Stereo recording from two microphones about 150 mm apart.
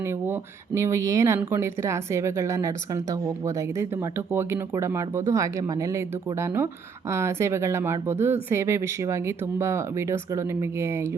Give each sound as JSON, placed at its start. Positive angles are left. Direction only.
{"t": 0.3, "sound": "a woman's voice", "side_deg": -20}